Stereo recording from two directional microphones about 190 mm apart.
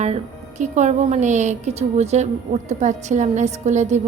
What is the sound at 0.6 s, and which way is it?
A woman's voice, 35° right (ahead or behind).